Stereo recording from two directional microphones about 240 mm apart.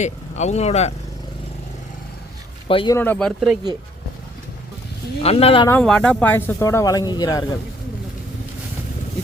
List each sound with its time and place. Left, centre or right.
0.0 s speech: left
2.6 s speech: centre
3.0 s speech: centre
5.2 s speech: left
5.6 s speech: centre